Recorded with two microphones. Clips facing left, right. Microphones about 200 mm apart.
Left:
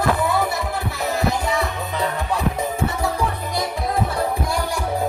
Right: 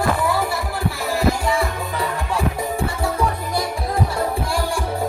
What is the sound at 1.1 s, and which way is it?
Music, 20° left (ahead or behind).